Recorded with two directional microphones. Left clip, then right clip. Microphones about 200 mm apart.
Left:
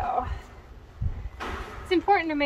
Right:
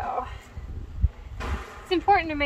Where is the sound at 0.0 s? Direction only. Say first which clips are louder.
Left 2 dB; 5° right (ahead or behind).